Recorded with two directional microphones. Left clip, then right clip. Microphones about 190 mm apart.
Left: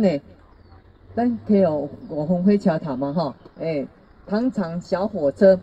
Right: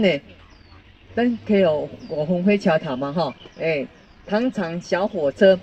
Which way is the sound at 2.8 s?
35° right (ahead or behind).